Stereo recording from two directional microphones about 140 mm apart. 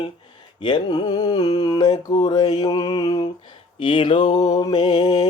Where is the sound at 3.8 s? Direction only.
35° left (ahead or behind).